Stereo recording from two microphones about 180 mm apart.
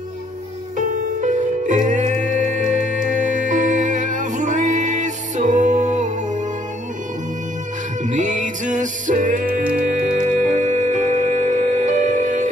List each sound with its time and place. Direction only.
0.7 s music: 45° right (ahead or behind)
8.0 s music: 45° right (ahead or behind)